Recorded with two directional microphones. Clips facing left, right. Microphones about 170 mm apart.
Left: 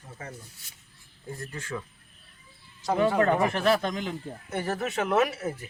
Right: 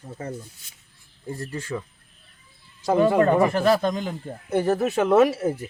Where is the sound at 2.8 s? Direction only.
45° right (ahead or behind).